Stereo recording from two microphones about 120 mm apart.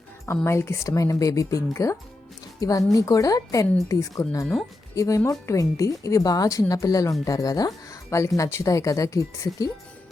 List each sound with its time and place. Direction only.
0.4 s a woman's voice: 20° left (ahead or behind)
7.9 s music: 25° left (ahead or behind)
8.4 s a woman's voice: 25° left (ahead or behind)